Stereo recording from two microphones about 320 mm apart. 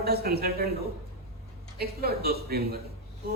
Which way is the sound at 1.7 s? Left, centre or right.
Right.